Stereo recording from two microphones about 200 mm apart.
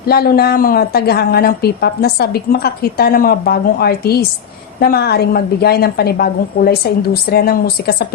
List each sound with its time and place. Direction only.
0.1 s a woman's voice: 50° left (ahead or behind)